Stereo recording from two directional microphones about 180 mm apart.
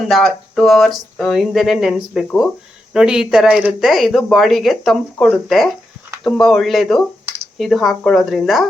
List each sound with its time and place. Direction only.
0.1 s speech: centre (ahead or behind)